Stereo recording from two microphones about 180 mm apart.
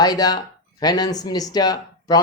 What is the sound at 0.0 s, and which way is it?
Speech, 20° left (ahead or behind).